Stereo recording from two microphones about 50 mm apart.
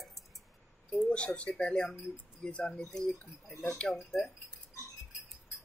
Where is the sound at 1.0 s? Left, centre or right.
Left; by 4.3 s centre.